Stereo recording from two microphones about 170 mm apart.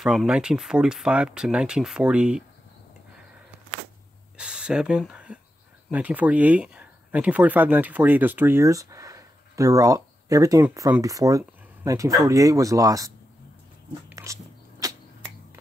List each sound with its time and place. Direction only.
0.0 s speech: centre (ahead or behind)
4.4 s speech: 5° right (ahead or behind)
14.1 s dog: 20° right (ahead or behind)